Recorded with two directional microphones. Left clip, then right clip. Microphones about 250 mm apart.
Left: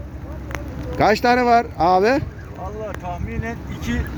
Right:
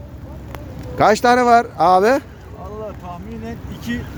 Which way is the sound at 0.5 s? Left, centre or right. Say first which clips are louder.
Left 1 dB; centre.